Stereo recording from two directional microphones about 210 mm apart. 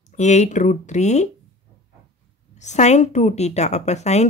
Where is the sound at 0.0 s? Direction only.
35° left (ahead or behind).